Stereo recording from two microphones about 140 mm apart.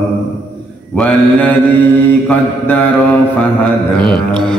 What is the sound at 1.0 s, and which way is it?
Mantra, 10° left (ahead or behind).